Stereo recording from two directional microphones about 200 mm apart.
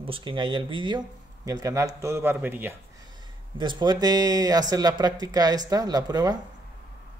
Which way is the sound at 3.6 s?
25° right (ahead or behind).